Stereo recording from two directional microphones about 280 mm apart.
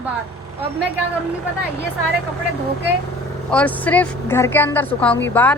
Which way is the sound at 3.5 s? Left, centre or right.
Centre.